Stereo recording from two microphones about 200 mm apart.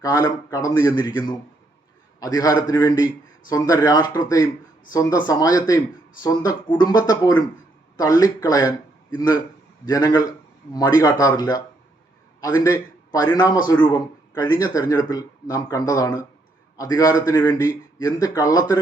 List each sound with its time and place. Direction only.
0.0 s a man's voice: 20° left (ahead or behind)